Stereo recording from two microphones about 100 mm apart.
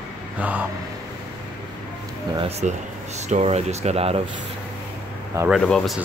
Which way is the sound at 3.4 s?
90° right.